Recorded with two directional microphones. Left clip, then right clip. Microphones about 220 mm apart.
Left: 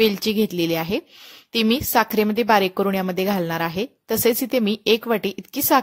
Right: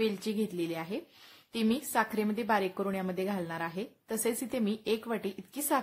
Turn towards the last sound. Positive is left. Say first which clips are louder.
# left 12 dB
turn(degrees=35)  # may be behind; listen again after turning